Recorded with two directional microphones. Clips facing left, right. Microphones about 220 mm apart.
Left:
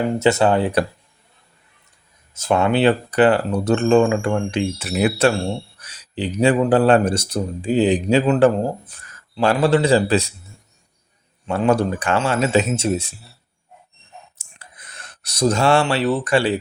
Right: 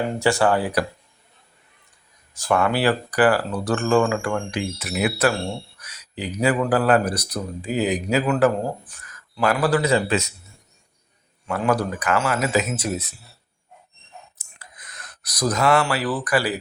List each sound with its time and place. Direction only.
0.2 s speech: 20° left (ahead or behind)
2.3 s speech: 20° left (ahead or behind)
11.4 s speech: 25° left (ahead or behind)
14.3 s a sound: 30° left (ahead or behind)